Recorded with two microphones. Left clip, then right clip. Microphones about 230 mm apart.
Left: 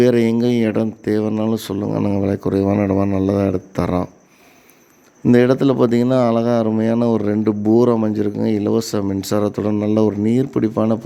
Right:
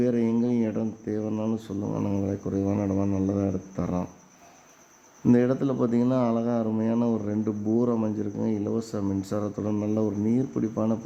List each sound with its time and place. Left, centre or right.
0.0 s speech: left
5.2 s speech: left